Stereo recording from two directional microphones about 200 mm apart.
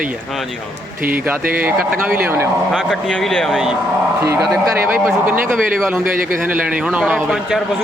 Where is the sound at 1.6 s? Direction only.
10° right (ahead or behind).